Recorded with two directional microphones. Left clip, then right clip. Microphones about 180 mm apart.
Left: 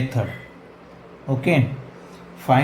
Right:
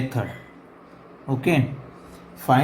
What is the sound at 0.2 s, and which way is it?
Speech, 10° right (ahead or behind).